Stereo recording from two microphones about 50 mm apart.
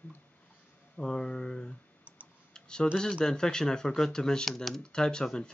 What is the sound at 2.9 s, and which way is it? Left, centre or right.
Speech, centre.